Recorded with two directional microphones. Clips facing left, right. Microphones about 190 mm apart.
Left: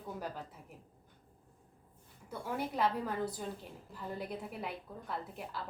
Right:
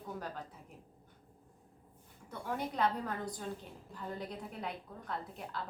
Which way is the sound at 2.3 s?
5° left (ahead or behind).